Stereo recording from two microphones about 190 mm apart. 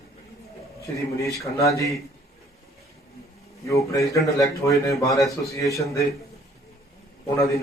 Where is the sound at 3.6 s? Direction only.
15° left (ahead or behind).